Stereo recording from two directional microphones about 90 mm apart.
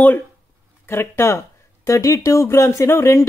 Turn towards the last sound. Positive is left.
turn(degrees=30)  # may be behind; listen again after turning